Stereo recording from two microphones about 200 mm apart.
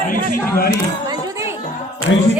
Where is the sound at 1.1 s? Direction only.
15° right (ahead or behind).